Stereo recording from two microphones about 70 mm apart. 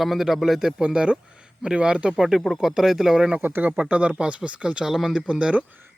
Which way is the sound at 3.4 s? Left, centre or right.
Right.